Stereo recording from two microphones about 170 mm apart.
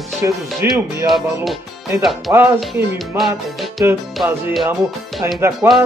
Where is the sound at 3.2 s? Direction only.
Centre (ahead or behind).